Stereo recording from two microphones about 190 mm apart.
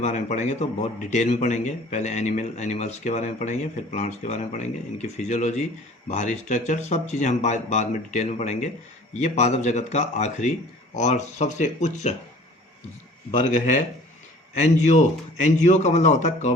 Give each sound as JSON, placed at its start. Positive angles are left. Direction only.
{"t": 0.0, "sound": "a man's voice", "side_deg": 40}
{"t": 13.3, "sound": "a man's voice", "side_deg": 40}